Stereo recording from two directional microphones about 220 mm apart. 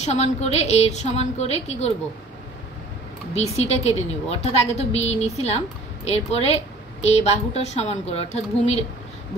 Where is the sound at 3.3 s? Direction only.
30° left (ahead or behind).